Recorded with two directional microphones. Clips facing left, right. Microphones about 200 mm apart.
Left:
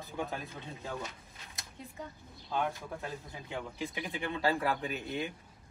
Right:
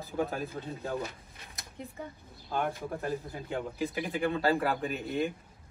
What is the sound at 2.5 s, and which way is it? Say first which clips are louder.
Speech: right 2 dB; 55° right (ahead or behind).